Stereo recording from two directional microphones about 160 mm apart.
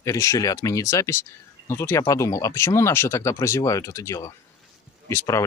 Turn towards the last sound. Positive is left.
turn(degrees=20)  # may be behind; listen again after turning